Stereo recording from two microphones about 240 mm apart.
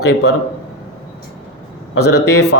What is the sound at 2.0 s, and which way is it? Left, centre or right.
Speech, left.